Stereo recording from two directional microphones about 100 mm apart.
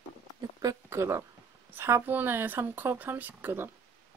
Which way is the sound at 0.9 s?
30° right (ahead or behind).